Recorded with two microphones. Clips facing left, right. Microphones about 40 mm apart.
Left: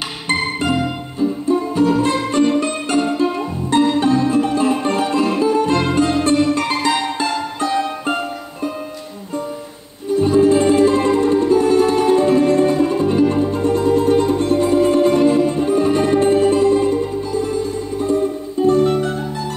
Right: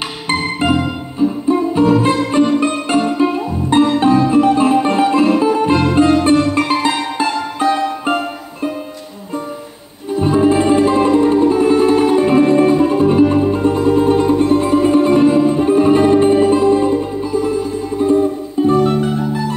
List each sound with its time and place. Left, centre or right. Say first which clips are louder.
1.2 s music: right 3 dB; right
10.2 s music: right 1 dB; right
18.7 s music: right 1 dB; centre